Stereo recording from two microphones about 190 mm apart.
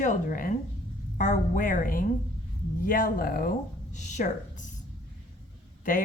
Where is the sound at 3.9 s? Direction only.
40° left (ahead or behind).